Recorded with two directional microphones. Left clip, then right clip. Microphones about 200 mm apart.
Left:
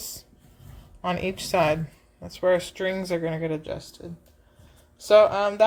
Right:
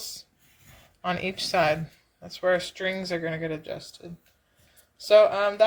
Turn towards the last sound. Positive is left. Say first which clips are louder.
# left 1 dB
turn(degrees=0)  # may be behind; listen again after turning